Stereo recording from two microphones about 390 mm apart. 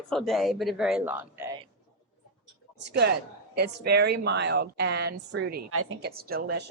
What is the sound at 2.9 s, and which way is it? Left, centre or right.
A woman's voice, right.